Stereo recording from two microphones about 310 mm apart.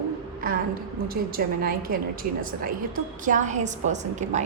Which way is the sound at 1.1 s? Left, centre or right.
Right.